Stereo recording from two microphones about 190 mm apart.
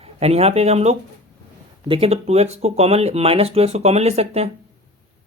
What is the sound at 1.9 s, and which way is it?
Speech, 30° right (ahead or behind).